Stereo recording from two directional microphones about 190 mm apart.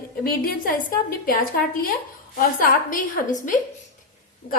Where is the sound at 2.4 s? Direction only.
45° left (ahead or behind).